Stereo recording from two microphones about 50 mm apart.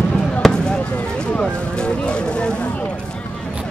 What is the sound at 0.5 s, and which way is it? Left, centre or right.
Fireworks, centre.